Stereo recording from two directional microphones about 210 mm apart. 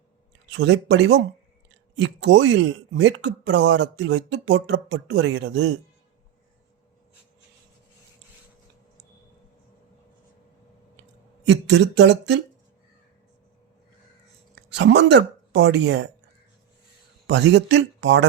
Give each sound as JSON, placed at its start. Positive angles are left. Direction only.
{"t": 0.5, "sound": "speech", "side_deg": -60}
{"t": 11.4, "sound": "speech", "side_deg": -55}
{"t": 14.5, "sound": "speech", "side_deg": -55}
{"t": 17.2, "sound": "speech", "side_deg": -55}